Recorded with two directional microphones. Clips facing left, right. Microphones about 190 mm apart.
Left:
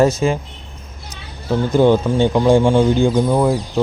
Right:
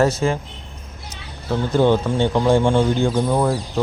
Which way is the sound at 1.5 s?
15° left (ahead or behind).